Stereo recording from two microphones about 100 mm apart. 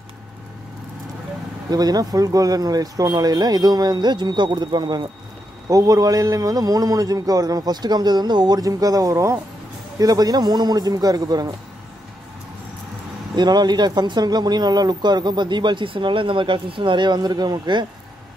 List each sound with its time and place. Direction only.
1.7 s a man's voice: 40° right (ahead or behind)
5.7 s a man's voice: 35° right (ahead or behind)
13.4 s speech: 45° right (ahead or behind)